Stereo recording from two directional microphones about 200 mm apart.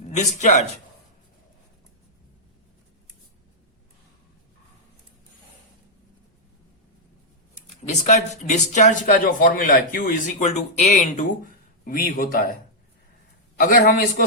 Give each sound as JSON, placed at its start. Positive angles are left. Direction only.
{"t": 0.2, "sound": "speech", "side_deg": 35}
{"t": 7.8, "sound": "a man's voice", "side_deg": 35}
{"t": 13.6, "sound": "a man's voice", "side_deg": 45}